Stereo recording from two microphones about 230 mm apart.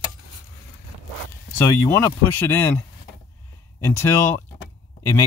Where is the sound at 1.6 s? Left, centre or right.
Centre.